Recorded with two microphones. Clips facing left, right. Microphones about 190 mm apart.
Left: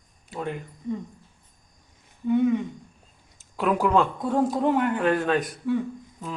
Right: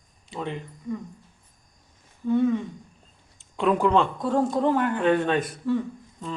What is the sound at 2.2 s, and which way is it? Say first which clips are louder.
Speech: left 1 dB; 15° left (ahead or behind).